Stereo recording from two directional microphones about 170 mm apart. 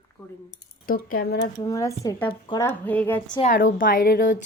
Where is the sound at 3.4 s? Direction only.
50° left (ahead or behind).